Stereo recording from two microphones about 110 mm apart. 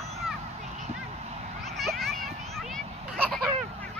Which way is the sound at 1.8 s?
Centre (ahead or behind).